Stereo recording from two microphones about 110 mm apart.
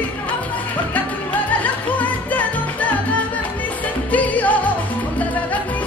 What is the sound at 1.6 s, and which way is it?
Music, 15° left (ahead or behind).